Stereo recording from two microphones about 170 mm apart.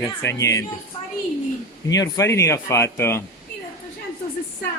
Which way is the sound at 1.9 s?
20° left (ahead or behind).